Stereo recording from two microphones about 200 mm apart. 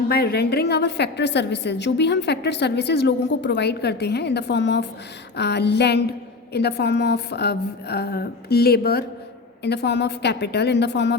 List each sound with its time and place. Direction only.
0.1 s a woman's voice: 50° left (ahead or behind)